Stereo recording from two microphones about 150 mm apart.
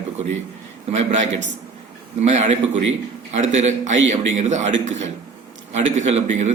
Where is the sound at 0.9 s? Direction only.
50° right (ahead or behind).